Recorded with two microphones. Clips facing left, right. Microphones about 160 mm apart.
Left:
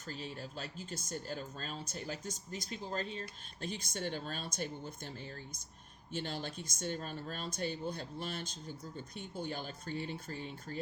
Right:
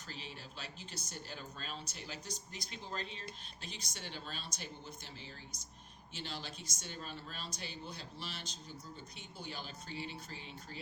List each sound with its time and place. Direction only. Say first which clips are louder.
0.1 s speech: left 7 dB; 45° left (ahead or behind)
6.1 s speech: left 6 dB; 50° left (ahead or behind)